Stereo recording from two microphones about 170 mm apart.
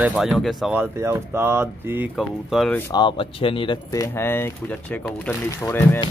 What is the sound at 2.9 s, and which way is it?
Speech, 30° left (ahead or behind).